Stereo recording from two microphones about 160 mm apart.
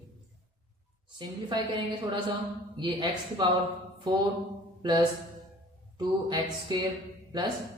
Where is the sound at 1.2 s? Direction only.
25° right (ahead or behind).